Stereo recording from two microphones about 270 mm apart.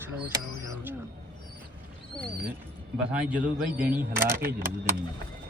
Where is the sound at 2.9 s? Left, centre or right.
Centre.